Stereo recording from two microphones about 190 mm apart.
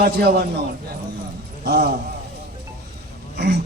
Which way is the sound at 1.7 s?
55° right (ahead or behind).